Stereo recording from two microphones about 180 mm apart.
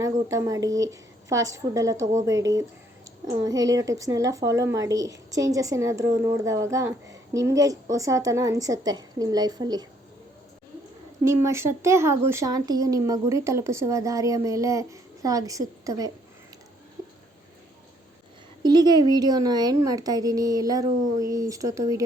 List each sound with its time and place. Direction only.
0.0 s a woman's voice: 20° right (ahead or behind)
11.3 s speech: 15° right (ahead or behind)
18.6 s a woman's voice: 25° right (ahead or behind)